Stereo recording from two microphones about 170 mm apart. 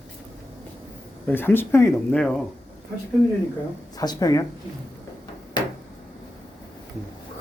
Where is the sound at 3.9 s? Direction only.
20° left (ahead or behind).